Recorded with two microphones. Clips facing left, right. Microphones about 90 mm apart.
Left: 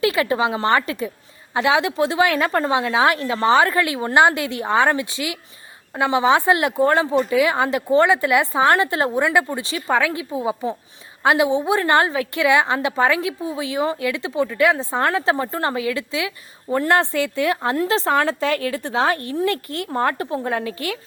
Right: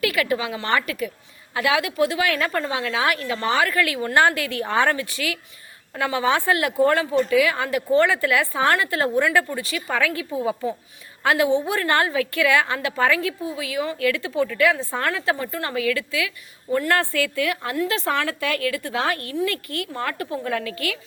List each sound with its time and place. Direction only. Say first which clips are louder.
0.0 s speech: left 4 dB; 25° left (ahead or behind)